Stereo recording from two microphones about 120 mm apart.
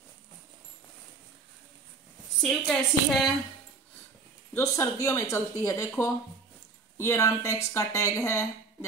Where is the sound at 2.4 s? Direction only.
Centre (ahead or behind).